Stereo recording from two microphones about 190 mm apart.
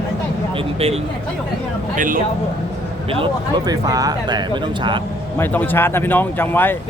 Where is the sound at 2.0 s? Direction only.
45° right (ahead or behind).